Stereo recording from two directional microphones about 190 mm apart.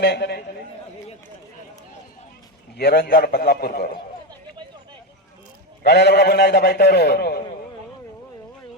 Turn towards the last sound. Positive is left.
turn(degrees=55)  # may be behind; listen again after turning